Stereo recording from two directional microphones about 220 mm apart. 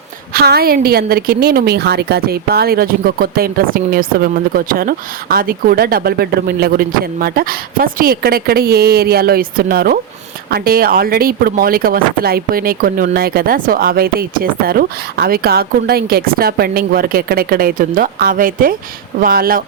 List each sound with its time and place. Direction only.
0.3 s a woman's voice: 45° right (ahead or behind)